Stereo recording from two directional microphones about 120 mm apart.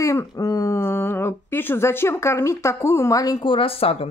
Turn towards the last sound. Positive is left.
turn(degrees=55)  # may be behind; listen again after turning